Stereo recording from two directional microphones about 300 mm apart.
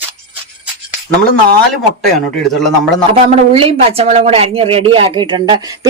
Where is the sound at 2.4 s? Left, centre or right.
Centre.